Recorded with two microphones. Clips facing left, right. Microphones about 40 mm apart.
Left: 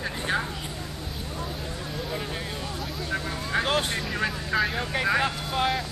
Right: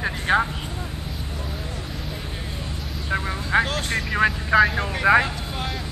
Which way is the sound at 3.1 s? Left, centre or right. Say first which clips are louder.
Right 7 dB; right.